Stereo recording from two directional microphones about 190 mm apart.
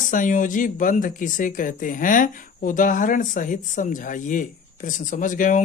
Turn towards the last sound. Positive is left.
turn(degrees=45)  # may be behind; listen again after turning